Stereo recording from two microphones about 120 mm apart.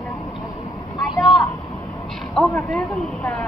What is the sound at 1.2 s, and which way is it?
Vehicle, 35° left (ahead or behind).